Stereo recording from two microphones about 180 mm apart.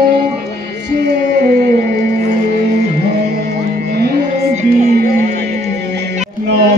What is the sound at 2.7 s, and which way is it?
Music, 40° right (ahead or behind).